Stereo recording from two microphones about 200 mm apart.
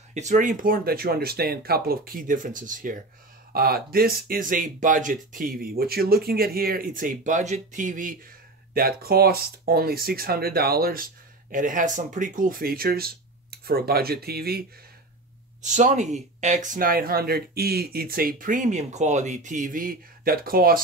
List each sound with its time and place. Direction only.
0.1 s speech: 35° right (ahead or behind)
15.6 s speech: 40° right (ahead or behind)